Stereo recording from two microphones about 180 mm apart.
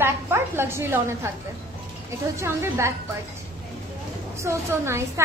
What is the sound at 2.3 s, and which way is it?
Speech, 15° right (ahead or behind).